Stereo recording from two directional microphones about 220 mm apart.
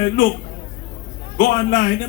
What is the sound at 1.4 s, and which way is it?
Speech, 35° left (ahead or behind).